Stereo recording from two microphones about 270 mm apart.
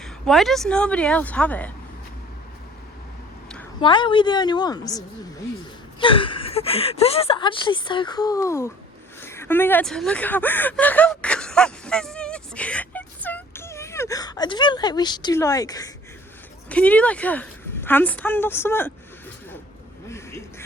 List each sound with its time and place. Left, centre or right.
0.0 s a woman's voice: centre
3.8 s a woman's voice: centre
9.2 s a sound: centre
16.6 s a woman's voice: centre
20.1 s quack: centre